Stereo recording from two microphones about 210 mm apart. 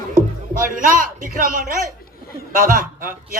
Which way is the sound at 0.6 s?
40° right (ahead or behind).